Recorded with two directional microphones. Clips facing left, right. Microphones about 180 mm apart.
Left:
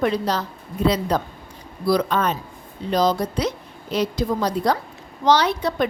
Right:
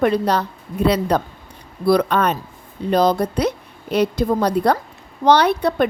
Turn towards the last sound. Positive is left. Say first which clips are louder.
# right 4 dB
turn(degrees=-60)  # may be behind; listen again after turning